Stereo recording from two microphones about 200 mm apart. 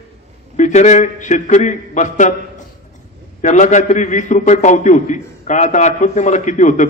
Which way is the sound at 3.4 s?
40° left (ahead or behind).